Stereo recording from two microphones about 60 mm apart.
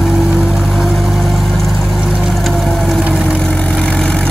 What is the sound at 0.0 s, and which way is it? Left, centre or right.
Vehicle, centre.